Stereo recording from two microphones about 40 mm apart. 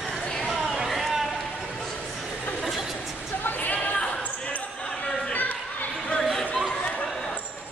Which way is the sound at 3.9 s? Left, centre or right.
Left.